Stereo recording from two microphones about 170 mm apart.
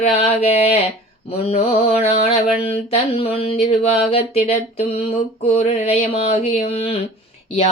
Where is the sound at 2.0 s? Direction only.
40° left (ahead or behind).